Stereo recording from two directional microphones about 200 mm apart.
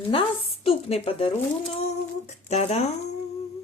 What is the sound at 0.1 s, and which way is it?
Speech, 30° left (ahead or behind).